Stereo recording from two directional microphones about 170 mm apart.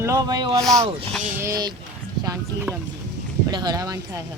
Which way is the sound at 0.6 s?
Centre (ahead or behind).